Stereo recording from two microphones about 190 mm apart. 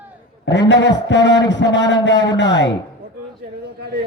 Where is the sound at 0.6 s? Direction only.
70° left (ahead or behind).